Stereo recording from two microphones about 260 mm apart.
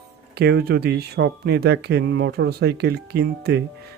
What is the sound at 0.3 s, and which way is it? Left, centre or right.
Speech, right.